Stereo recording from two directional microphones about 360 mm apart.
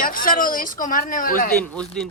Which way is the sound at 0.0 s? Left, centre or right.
Left.